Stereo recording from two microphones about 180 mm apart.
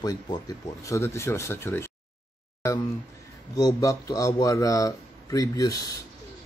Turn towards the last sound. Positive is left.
turn(degrees=20)  # may be behind; listen again after turning